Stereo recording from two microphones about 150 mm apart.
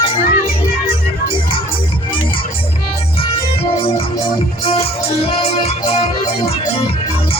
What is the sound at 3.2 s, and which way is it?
Music, 40° left (ahead or behind).